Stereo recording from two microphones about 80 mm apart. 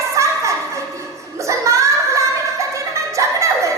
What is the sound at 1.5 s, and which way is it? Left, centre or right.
Child singing, right.